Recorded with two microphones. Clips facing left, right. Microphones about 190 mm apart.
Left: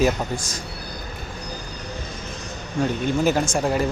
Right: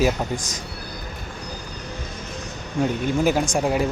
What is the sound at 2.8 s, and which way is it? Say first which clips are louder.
Speech: even; 15° right (ahead or behind).